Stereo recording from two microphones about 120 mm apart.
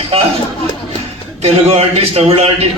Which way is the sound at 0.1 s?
50° right (ahead or behind).